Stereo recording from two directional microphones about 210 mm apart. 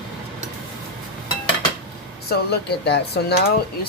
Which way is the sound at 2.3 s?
50° left (ahead or behind).